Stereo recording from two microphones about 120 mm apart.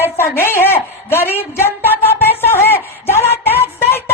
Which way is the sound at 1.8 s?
15° left (ahead or behind).